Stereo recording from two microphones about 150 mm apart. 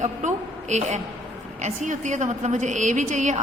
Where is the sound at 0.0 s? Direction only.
50° right (ahead or behind).